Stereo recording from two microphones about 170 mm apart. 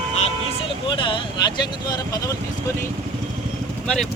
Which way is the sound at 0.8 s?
30° left (ahead or behind).